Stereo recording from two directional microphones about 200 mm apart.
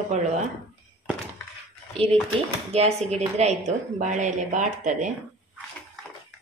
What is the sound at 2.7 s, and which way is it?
A woman's voice, 30° right (ahead or behind).